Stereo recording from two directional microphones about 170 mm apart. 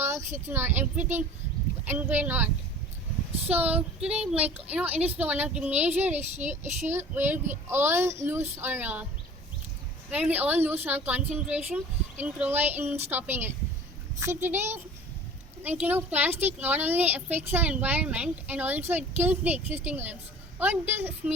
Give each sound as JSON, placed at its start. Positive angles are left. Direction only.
{"t": 0.0, "sound": "a sound", "side_deg": -15}
{"t": 0.3, "sound": "speech", "side_deg": -15}
{"t": 3.5, "sound": "speech", "side_deg": -10}
{"t": 6.9, "sound": "speech", "side_deg": -10}
{"t": 10.1, "sound": "speech", "side_deg": -10}